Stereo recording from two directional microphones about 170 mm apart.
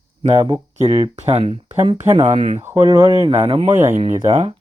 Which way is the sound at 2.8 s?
20° right (ahead or behind).